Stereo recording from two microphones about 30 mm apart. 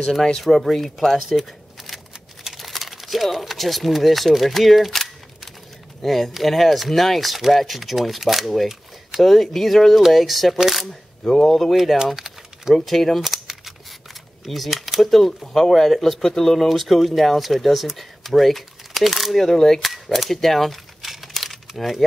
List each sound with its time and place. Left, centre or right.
0.4 s speech: centre
1.8 s shuffling cards: centre
2.5 s speech: centre
10.6 s camera: centre
11.4 s speech: centre
12.2 s typing: centre
12.7 s speech: centre
13.2 s a sound: centre
14.4 s speech: centre
15.0 s speech: centre
16.6 s speech: centre
19.4 s speech: centre
19.8 s speech: centre
20.3 s crumpling: centre